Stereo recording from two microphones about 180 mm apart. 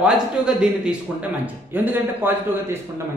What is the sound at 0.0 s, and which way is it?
A man's voice, 5° right (ahead or behind).